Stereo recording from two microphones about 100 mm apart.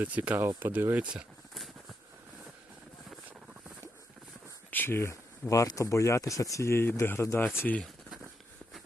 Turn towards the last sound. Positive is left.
turn(degrees=15)  # may be behind; listen again after turning